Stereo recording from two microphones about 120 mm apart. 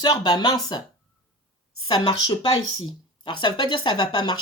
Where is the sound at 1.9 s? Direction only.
40° left (ahead or behind).